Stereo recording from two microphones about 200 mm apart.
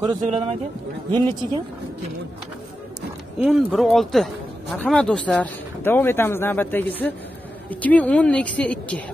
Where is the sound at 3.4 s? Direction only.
Centre (ahead or behind).